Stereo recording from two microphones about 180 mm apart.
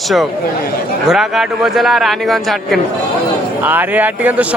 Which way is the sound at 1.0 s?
Centre (ahead or behind).